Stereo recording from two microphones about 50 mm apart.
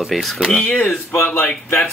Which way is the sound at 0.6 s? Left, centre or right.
Left.